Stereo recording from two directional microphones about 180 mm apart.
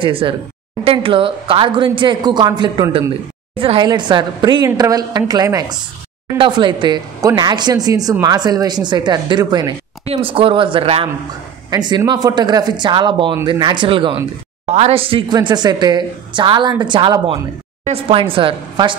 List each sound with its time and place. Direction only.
0.0 s a woman's voice: 30° right (ahead or behind)